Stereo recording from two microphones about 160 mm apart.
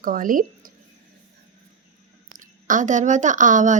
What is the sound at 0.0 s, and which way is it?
Speech, 60° right (ahead or behind).